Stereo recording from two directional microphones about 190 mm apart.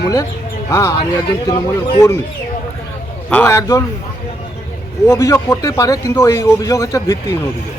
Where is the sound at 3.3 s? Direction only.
10° left (ahead or behind).